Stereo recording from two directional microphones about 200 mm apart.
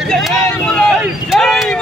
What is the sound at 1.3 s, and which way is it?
Vehicle, centre (ahead or behind).